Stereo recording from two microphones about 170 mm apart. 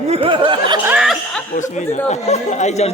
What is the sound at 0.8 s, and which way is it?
Speech, 5° right (ahead or behind).